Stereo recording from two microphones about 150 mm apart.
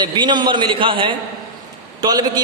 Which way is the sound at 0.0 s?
30° right (ahead or behind).